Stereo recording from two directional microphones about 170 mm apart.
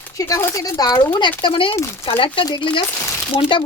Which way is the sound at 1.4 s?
30° left (ahead or behind).